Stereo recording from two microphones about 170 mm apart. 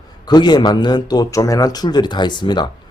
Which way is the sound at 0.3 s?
25° left (ahead or behind).